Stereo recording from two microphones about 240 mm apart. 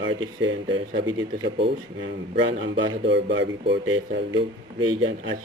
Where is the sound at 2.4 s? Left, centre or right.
Right.